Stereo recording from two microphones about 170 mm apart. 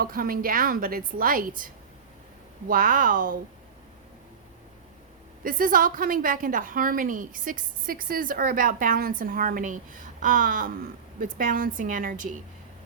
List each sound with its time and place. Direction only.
0.0 s a woman's voice: 60° right (ahead or behind)
5.4 s a woman's voice: 55° right (ahead or behind)